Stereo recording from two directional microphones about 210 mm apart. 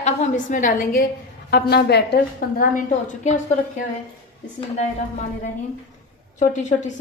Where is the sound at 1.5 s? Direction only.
50° left (ahead or behind).